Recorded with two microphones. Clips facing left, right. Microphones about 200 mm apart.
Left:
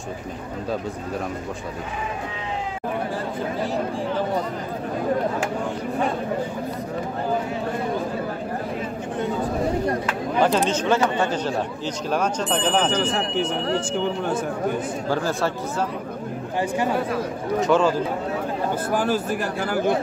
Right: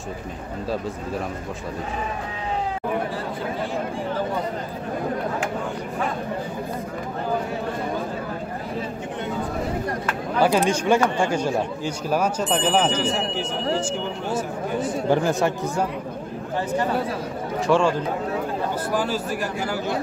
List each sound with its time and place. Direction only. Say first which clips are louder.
10.4 s speech: right 1 dB; 10° right (ahead or behind)
13.0 s speech: left 2 dB; 50° left (ahead or behind)
15.0 s speech: right 4 dB; 20° right (ahead or behind)
17.6 s speech: even; centre (ahead or behind)
18.9 s speech: left 4 dB; 55° left (ahead or behind)